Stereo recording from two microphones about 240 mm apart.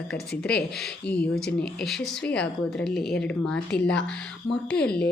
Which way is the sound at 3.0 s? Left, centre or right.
Left.